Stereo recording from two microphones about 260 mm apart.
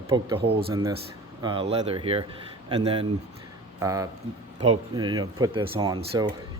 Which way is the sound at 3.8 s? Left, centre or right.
Centre.